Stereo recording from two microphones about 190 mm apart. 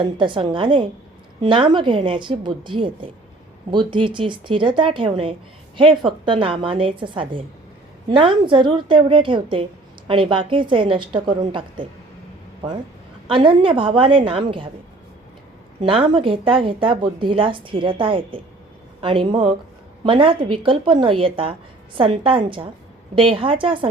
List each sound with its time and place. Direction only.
0.0 s speech: 25° right (ahead or behind)
13.2 s speech: 30° right (ahead or behind)
15.8 s speech: 30° right (ahead or behind)